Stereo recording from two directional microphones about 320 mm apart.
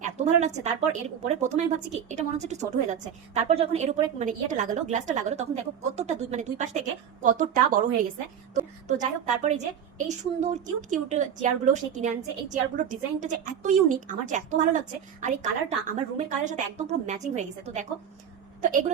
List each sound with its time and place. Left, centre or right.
0.0 s a woman's voice: right